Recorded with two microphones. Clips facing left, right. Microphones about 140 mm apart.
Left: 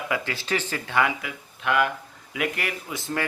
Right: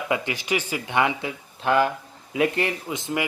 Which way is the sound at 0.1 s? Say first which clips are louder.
Right 3 dB; 15° right (ahead or behind).